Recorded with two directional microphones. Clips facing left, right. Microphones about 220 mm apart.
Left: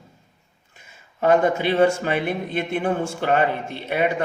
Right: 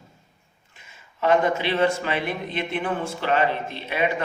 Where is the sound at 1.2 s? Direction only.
45° left (ahead or behind).